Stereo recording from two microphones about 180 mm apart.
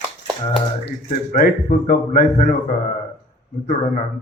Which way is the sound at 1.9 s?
50° left (ahead or behind).